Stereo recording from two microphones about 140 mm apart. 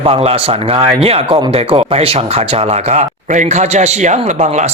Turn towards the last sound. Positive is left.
turn(degrees=-55)  # may be behind; listen again after turning